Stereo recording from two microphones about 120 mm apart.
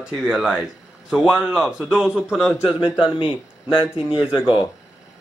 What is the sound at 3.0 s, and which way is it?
Speech, 45° left (ahead or behind).